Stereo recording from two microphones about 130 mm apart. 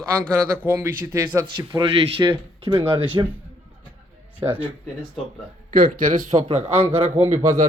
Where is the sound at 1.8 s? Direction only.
45° right (ahead or behind).